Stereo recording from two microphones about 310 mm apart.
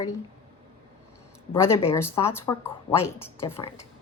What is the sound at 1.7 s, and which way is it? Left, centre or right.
Speech, centre.